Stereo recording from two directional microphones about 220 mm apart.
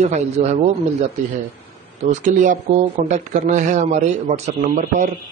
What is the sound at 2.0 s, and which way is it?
Speech, 35° right (ahead or behind).